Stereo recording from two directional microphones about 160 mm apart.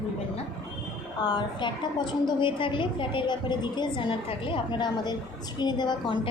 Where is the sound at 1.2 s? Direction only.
25° left (ahead or behind).